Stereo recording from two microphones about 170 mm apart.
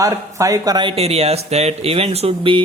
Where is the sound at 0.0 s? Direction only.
20° right (ahead or behind).